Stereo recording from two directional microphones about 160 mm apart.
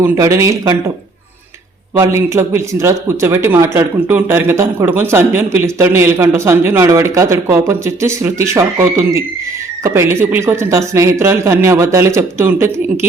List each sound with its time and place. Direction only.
0.0 s speech: 20° right (ahead or behind)
2.0 s speech: 15° right (ahead or behind)